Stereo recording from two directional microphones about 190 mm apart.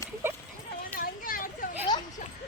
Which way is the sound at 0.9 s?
50° left (ahead or behind).